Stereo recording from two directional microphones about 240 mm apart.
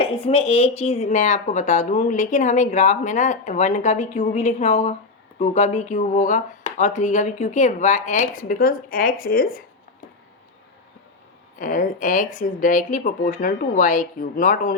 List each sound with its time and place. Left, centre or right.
0.0 s speech: left
11.6 s speech: left